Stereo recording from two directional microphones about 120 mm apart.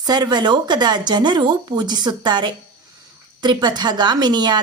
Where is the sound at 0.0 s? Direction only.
35° right (ahead or behind).